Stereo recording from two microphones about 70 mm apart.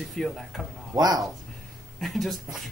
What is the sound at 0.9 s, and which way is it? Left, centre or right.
Speech, right.